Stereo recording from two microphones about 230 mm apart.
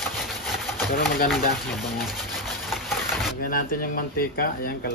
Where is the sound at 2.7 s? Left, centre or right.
Centre.